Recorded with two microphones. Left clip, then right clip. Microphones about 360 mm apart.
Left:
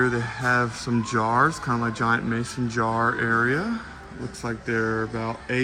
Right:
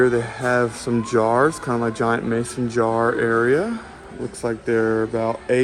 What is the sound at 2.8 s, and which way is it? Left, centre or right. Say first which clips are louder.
Speech: right 4 dB; right.